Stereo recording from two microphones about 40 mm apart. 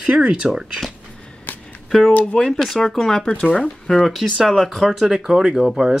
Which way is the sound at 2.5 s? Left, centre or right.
Centre.